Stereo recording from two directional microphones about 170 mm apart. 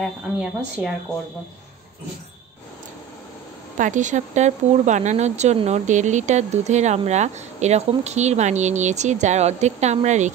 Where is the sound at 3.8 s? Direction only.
45° right (ahead or behind).